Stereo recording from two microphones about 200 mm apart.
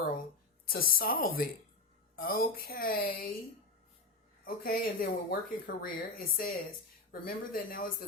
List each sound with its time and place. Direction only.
0.7 s speech: 45° left (ahead or behind)
4.4 s speech: 45° left (ahead or behind)